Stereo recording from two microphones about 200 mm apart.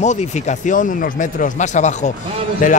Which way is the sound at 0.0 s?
35° left (ahead or behind).